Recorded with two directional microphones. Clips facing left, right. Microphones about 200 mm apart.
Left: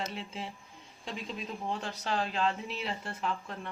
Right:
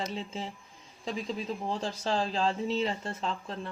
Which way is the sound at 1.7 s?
30° right (ahead or behind).